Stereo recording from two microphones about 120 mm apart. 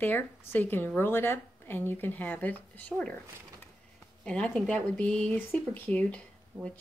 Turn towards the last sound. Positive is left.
turn(degrees=10)  # may be behind; listen again after turning